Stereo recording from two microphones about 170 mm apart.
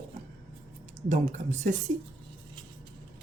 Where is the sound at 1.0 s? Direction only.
40° right (ahead or behind).